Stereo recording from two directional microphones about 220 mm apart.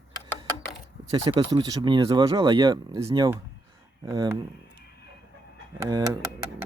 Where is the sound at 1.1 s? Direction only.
20° right (ahead or behind).